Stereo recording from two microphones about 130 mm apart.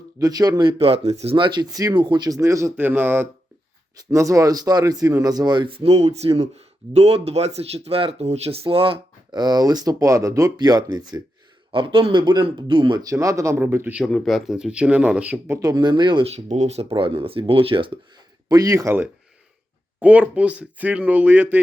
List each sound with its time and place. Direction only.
0.2 s speech: 30° right (ahead or behind)
0.8 s speech: 50° right (ahead or behind); by 14.0 s 15° right (ahead or behind)
14.0 s speech: 5° left (ahead or behind)
15.6 s speech: 35° right (ahead or behind)
16.3 s speech: 60° right (ahead or behind); by 18.0 s 40° right (ahead or behind)
18.4 s speech: 30° right (ahead or behind)
20.0 s speech: 10° right (ahead or behind)